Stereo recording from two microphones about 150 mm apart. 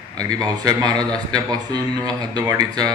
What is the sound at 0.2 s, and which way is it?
A man's voice, 25° right (ahead or behind).